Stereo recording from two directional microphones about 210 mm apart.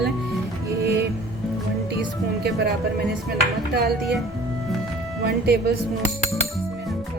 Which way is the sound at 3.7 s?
50° right (ahead or behind).